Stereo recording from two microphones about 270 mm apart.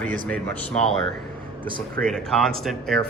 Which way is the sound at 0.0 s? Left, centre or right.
Right.